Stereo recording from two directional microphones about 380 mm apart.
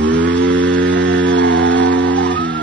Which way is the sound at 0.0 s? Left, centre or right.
Right.